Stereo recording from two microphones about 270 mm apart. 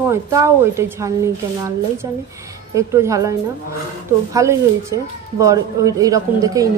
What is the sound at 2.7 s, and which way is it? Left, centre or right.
A woman's voice, centre.